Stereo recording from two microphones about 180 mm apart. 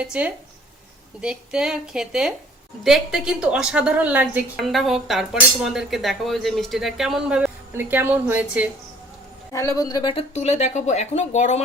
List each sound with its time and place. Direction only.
0.0 s a woman's voice: 5° right (ahead or behind)
9.5 s speech: 15° left (ahead or behind); by 11.6 s 40° left (ahead or behind)